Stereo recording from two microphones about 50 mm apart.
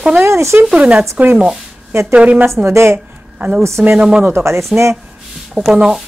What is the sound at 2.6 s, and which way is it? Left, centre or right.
Speech, right.